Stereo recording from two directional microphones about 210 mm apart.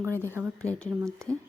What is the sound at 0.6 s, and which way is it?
Speech, 5° left (ahead or behind).